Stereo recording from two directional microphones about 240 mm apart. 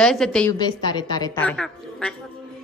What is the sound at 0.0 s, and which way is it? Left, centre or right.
Speech, centre.